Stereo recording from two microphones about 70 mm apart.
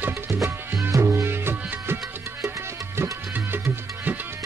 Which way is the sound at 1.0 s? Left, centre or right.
Right.